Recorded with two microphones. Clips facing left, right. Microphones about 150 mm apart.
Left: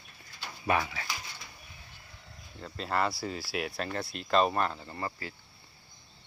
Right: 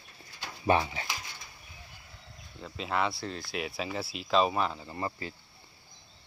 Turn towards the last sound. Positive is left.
turn(degrees=-20)  # may be behind; listen again after turning